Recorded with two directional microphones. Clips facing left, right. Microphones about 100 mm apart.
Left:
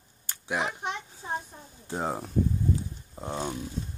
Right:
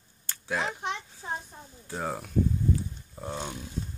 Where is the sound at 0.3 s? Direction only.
15° left (ahead or behind).